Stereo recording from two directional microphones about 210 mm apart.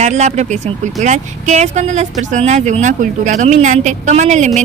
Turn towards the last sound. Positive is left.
turn(degrees=-35)  # may be behind; listen again after turning